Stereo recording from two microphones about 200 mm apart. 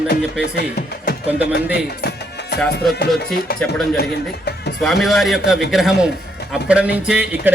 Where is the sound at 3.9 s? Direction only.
55° left (ahead or behind).